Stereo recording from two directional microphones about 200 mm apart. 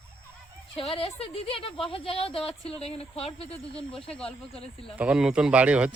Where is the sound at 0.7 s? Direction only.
25° left (ahead or behind).